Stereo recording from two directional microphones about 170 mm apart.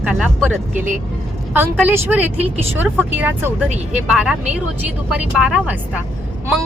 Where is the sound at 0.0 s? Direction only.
5° right (ahead or behind).